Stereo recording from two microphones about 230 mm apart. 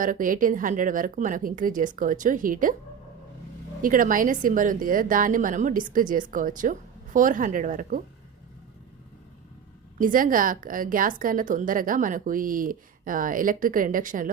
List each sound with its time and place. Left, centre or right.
0.0 s a woman's voice: right
3.8 s a woman's voice: right
10.0 s a woman's voice: right